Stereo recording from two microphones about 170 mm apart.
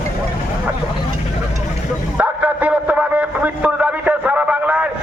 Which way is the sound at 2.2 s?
10° right (ahead or behind).